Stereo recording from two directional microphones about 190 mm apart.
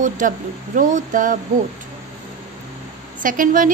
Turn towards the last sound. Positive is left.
turn(degrees=-45)  # may be behind; listen again after turning